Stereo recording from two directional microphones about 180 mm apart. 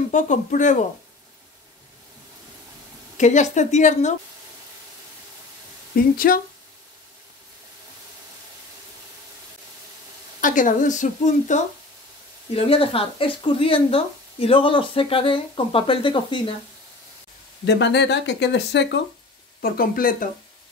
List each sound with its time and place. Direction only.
0.1 s a woman's voice: 45° left (ahead or behind)
3.2 s a woman's voice: 40° left (ahead or behind)
5.9 s a woman's voice: 50° left (ahead or behind)
10.4 s a woman's voice: 45° left (ahead or behind)
12.5 s speech: 30° left (ahead or behind)
17.6 s speech: 70° left (ahead or behind)
19.6 s a woman's voice: 55° left (ahead or behind)